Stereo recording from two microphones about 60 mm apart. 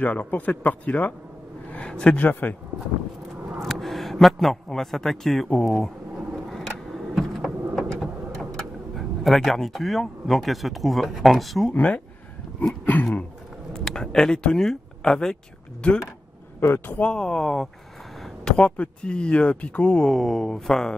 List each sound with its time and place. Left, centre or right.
0.0 s a man's voice: left
2.1 s speech: left
3.6 s a man's voice: centre
6.3 s vehicle: centre
7.2 s a sound: centre
8.0 s speech: centre
11.7 s speech: left
13.7 s speech: centre
16.7 s speech: left
17.0 s speech: centre
18.2 s a sound: centre
18.8 s speech: centre
20.1 s speech: centre